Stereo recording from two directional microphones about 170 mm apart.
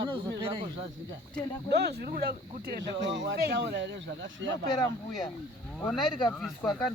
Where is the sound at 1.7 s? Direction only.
75° right (ahead or behind).